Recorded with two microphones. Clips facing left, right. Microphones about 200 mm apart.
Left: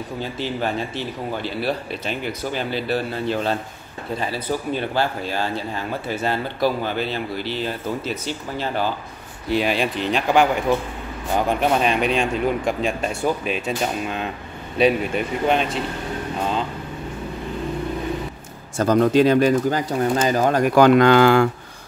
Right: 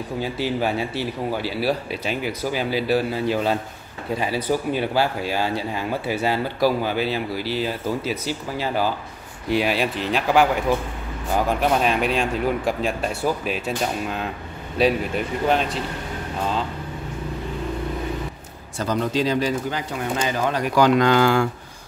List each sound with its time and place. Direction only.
0.2 s speech: 10° right (ahead or behind)
18.8 s speech: 50° left (ahead or behind)
20.2 s speech: 45° left (ahead or behind); by 21.5 s 60° left (ahead or behind)